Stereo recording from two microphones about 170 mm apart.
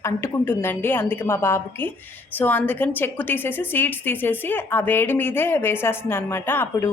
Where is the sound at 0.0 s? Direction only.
15° left (ahead or behind).